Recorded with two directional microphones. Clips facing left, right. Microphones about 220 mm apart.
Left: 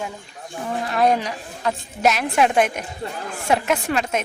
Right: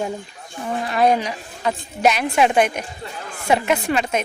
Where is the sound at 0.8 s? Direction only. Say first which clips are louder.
Right 1 dB; centre (ahead or behind).